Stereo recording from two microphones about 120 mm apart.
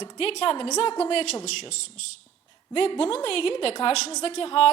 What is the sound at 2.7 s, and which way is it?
A woman's voice, 55° left (ahead or behind).